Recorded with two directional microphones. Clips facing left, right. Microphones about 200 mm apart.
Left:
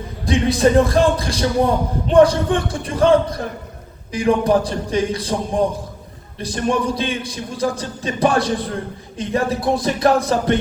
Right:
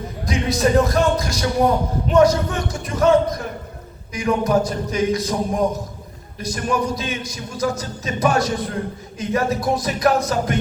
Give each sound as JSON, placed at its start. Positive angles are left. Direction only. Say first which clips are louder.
{"t": 0.3, "sound": "speech", "louder": "left 4 dB", "side_deg": 30}